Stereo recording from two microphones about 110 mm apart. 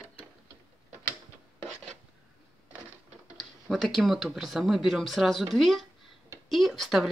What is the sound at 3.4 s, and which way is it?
Speech, centre (ahead or behind).